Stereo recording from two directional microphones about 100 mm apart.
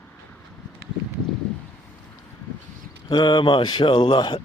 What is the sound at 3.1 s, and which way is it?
Speech, 45° left (ahead or behind).